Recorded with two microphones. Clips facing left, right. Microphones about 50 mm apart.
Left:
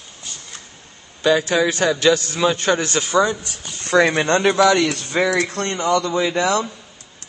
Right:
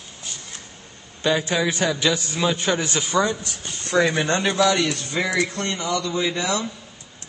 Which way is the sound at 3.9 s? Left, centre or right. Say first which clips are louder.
Left 4 dB; left.